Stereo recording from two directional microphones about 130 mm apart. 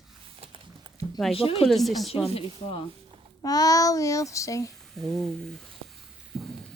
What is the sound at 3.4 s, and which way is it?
Child singing, 30° left (ahead or behind).